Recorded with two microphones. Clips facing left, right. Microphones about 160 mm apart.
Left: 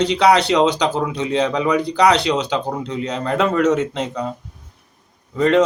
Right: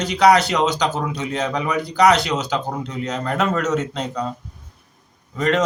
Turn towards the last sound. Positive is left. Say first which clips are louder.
# left 4 dB
turn(degrees=30)  # may be behind; listen again after turning